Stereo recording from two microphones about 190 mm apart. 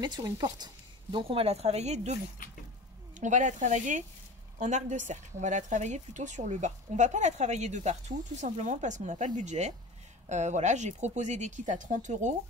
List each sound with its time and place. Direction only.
0.0 s speech: 20° right (ahead or behind)
3.2 s speech: 40° right (ahead or behind)